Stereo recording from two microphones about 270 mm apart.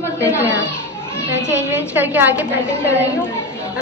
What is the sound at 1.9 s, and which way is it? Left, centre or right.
Speech, centre.